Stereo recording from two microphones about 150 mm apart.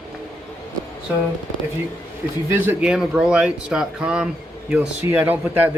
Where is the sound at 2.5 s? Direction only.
10° right (ahead or behind).